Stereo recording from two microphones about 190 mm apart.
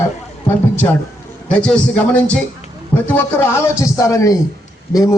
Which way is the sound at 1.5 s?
5° left (ahead or behind).